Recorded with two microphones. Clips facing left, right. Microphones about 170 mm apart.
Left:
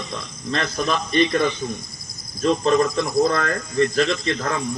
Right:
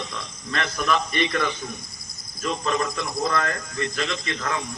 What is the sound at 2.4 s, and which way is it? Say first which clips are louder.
A man's voice: left 8 dB; 30° left (ahead or behind).